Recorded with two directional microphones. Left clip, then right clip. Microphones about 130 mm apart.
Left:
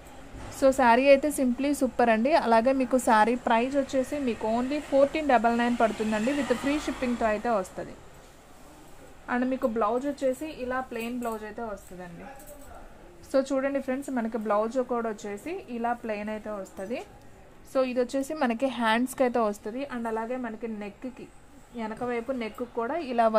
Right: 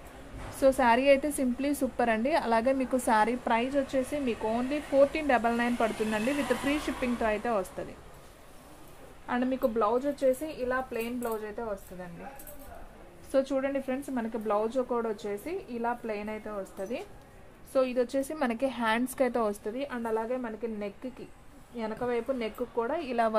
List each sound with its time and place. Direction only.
0.6 s a woman's voice: 50° left (ahead or behind); by 7.9 s 35° left (ahead or behind)
9.2 s a woman's voice: 40° left (ahead or behind)
13.3 s a woman's voice: 55° left (ahead or behind); by 15.5 s 35° left (ahead or behind)
15.8 s a woman's voice: 50° left (ahead or behind); by 23.3 s 30° left (ahead or behind)